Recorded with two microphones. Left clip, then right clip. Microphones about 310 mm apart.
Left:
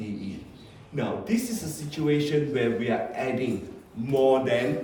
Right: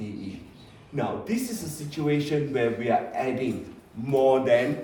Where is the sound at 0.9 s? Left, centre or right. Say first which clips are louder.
Even; centre.